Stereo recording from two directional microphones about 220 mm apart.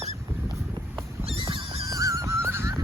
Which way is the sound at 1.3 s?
25° right (ahead or behind).